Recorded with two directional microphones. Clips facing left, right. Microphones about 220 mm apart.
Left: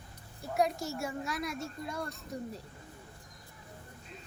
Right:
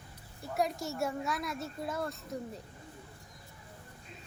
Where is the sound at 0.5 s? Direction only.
Centre (ahead or behind).